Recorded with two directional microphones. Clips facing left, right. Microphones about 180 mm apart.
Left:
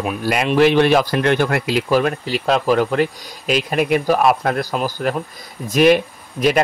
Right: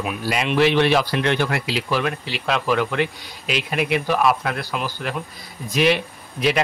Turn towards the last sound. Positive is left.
turn(degrees=45)  # may be behind; listen again after turning